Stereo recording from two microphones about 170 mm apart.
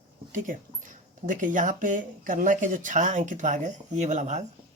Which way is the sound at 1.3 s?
50° right (ahead or behind).